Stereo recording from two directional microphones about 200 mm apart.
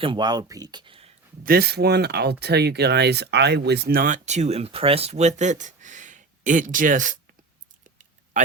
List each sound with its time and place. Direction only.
0.0 s speech: 25° right (ahead or behind)
1.5 s speech: 50° right (ahead or behind)
7.9 s a sound: 40° right (ahead or behind)